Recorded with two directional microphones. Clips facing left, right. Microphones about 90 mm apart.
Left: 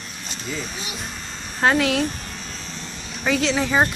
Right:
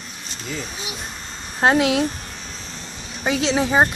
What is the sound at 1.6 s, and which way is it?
Speech, 25° right (ahead or behind).